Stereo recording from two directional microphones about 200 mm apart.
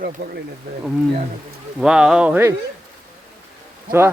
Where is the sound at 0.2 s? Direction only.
55° right (ahead or behind).